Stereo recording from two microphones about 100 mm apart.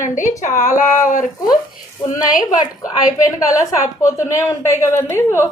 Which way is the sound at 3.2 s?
30° left (ahead or behind).